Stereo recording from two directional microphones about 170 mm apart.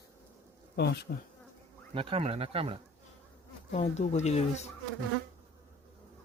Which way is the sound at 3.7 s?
40° left (ahead or behind).